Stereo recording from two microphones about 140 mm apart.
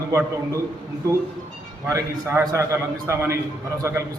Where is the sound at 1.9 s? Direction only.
20° right (ahead or behind).